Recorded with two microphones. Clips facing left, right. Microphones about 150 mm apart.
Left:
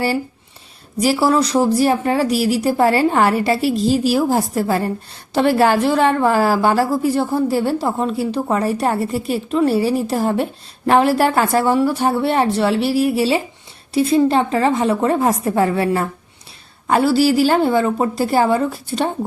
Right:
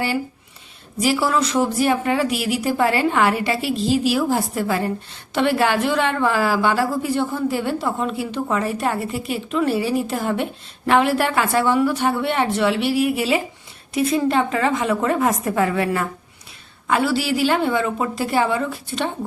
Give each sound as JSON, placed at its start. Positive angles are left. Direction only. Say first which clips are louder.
{"t": 1.0, "sound": "a woman's voice", "louder": "left 4 dB", "side_deg": 35}